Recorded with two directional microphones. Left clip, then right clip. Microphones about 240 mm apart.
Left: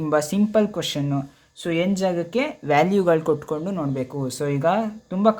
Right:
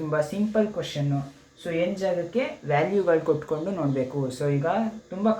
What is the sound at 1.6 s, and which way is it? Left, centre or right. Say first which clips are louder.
Speech: left 3 dB; left.